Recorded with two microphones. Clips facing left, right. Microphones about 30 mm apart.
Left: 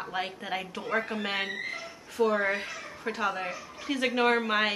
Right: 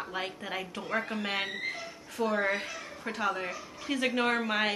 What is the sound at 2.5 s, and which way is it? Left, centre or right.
Speech, left.